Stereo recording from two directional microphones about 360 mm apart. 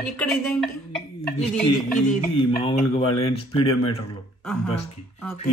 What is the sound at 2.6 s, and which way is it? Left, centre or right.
Speech, centre.